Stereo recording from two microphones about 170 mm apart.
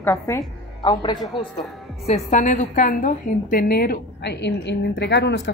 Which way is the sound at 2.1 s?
45° left (ahead or behind).